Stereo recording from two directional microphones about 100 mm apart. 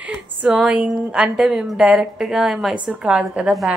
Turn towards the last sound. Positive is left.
turn(degrees=-10)  # may be behind; listen again after turning